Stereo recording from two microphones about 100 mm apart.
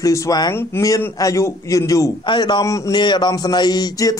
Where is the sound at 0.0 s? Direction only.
35° left (ahead or behind).